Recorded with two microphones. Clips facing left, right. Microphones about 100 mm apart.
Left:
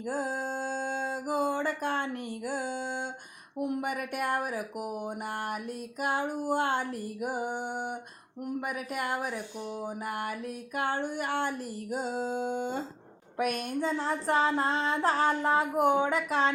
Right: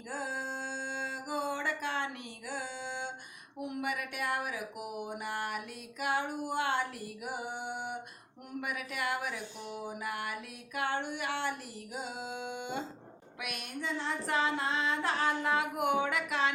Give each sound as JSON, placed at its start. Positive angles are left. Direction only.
{"t": 0.1, "sound": "mantra", "side_deg": 45}
{"t": 2.5, "sound": "a sound", "side_deg": 45}
{"t": 10.8, "sound": "female singing", "side_deg": 40}